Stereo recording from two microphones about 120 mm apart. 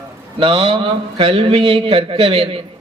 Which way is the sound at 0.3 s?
50° right (ahead or behind).